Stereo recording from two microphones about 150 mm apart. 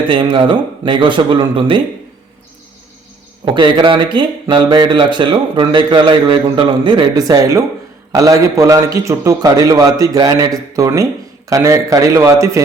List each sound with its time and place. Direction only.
0.1 s speech: 35° right (ahead or behind)
3.4 s a man's voice: 30° right (ahead or behind)